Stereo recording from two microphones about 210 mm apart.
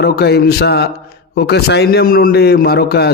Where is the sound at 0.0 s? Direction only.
50° left (ahead or behind).